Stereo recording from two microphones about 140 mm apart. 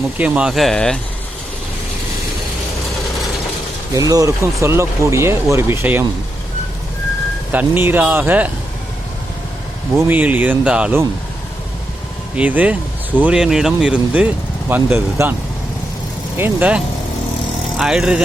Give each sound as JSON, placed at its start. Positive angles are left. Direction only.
{"t": 0.2, "sound": "speech", "side_deg": -10}
{"t": 3.9, "sound": "speech", "side_deg": -25}
{"t": 7.5, "sound": "speech", "side_deg": -10}
{"t": 9.9, "sound": "speech", "side_deg": -10}
{"t": 12.4, "sound": "speech", "side_deg": -10}
{"t": 16.4, "sound": "speech", "side_deg": -10}